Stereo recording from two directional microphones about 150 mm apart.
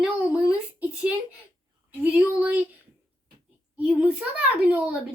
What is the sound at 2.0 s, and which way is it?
Speech, 10° right (ahead or behind).